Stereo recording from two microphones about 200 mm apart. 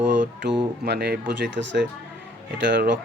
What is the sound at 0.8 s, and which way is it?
Speech, 55° right (ahead or behind).